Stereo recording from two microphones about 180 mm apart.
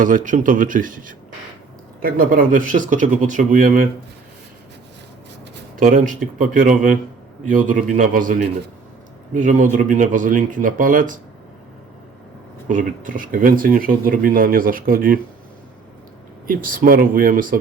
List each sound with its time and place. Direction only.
0.0 s speech: 45° right (ahead or behind)
5.8 s speech: 50° right (ahead or behind)
12.6 s speech: 50° right (ahead or behind)
16.5 s speech: 50° right (ahead or behind)